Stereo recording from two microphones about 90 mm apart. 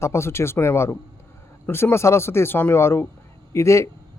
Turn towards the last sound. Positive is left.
turn(degrees=35)  # may be behind; listen again after turning